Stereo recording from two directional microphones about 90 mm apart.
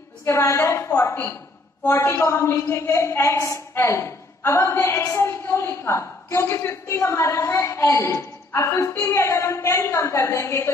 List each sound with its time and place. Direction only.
0.2 s a woman's voice: 30° left (ahead or behind)